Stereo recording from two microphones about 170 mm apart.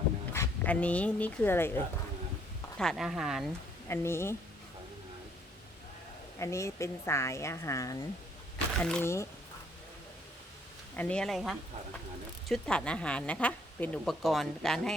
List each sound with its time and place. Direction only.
0.3 s speech: 10° left (ahead or behind)
2.7 s speech: centre (ahead or behind)
3.8 s a woman's voice: 15° left (ahead or behind)
6.4 s a woman's voice: 15° left (ahead or behind)
10.9 s speech: 10° left (ahead or behind)